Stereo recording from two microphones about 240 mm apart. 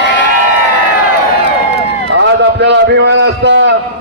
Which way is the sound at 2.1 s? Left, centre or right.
Right.